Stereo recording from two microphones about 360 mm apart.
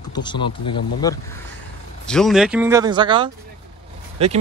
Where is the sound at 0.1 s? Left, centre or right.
Centre.